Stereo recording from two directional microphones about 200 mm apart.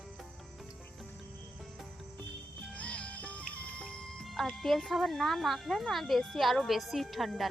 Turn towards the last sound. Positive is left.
turn(degrees=0)  # may be behind; listen again after turning